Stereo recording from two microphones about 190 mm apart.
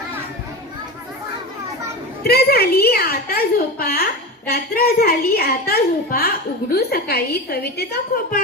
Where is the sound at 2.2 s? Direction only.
55° left (ahead or behind).